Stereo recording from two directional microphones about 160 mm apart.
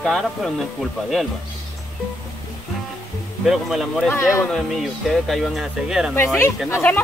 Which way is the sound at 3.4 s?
Centre (ahead or behind).